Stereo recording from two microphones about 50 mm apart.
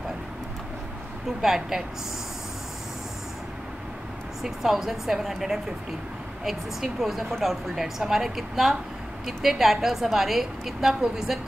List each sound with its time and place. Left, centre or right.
1.4 s a woman's voice: centre
4.4 s a woman's voice: centre